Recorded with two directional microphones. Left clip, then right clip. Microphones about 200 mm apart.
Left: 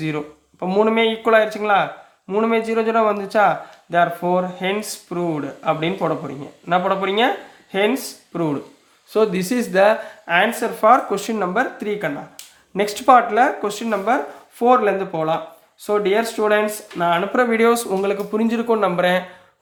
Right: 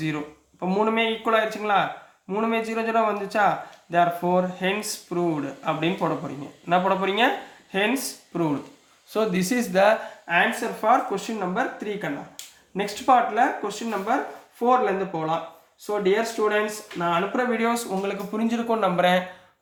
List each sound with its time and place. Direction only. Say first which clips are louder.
0.6 s speech: left 6 dB; 30° left (ahead or behind)
10.2 s speech: left 4 dB; 40° left (ahead or behind); by 19.2 s 25° left (ahead or behind)